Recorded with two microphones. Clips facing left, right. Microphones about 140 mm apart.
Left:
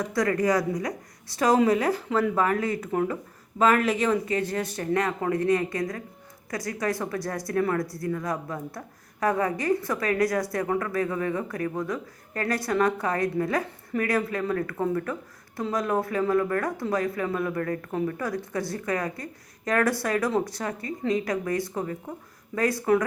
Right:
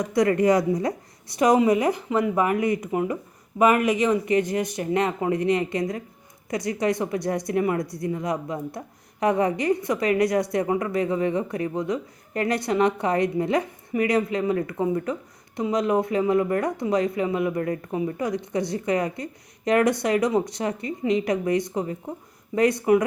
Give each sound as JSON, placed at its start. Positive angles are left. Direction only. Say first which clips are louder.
{"t": 0.0, "sound": "a woman's voice", "louder": "right 4 dB", "side_deg": -20}